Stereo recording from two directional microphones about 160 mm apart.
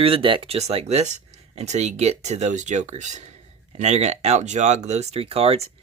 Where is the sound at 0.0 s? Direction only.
35° right (ahead or behind).